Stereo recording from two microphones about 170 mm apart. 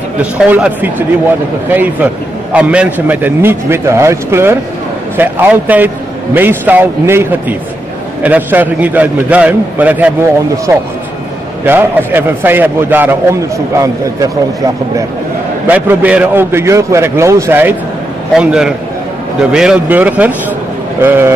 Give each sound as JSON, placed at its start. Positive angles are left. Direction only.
{"t": 0.2, "sound": "a man's voice", "side_deg": -5}
{"t": 15.6, "sound": "a man's voice", "side_deg": -10}